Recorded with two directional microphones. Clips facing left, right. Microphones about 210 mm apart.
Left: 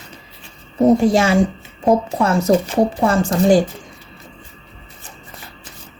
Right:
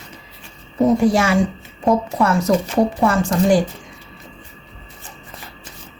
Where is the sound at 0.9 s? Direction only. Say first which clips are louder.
Left 2 dB; 25° left (ahead or behind).